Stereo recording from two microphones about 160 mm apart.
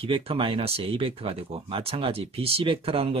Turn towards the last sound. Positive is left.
turn(degrees=-35)  # may be behind; listen again after turning